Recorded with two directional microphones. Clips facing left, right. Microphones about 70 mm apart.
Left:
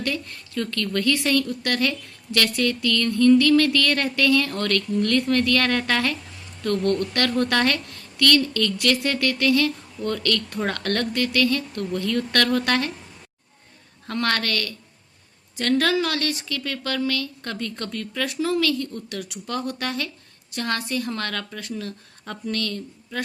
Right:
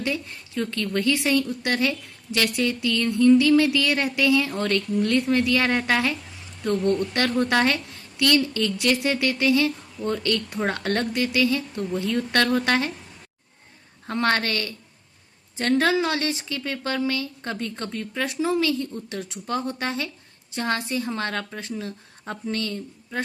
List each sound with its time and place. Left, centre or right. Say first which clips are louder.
0.0 s a woman's voice: even; centre
14.1 s speech: right 1 dB; right